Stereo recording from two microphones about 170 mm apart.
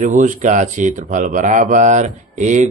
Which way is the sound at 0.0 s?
45° right (ahead or behind).